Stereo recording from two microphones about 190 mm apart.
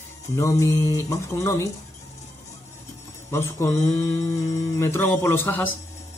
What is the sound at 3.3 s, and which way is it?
Speech, 15° left (ahead or behind).